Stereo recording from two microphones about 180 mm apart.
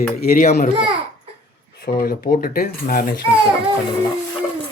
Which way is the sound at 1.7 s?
55° left (ahead or behind).